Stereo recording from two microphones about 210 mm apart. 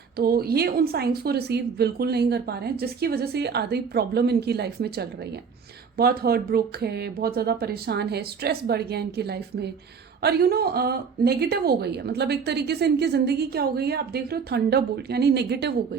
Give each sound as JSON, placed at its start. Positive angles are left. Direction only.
{"t": 0.2, "sound": "a woman's voice", "side_deg": -45}